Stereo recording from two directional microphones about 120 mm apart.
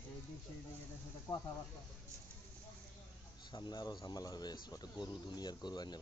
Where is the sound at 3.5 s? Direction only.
35° left (ahead or behind).